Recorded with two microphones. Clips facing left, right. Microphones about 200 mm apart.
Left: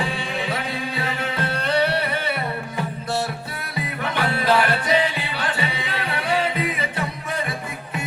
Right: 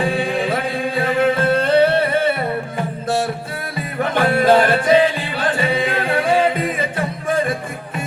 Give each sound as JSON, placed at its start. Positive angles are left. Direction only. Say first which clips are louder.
{"t": 0.0, "sound": "music", "louder": "right 8 dB", "side_deg": -55}
{"t": 4.0, "sound": "music", "louder": "right 8 dB", "side_deg": -50}